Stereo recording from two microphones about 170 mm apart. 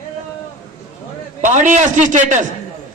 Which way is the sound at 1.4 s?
45° right (ahead or behind).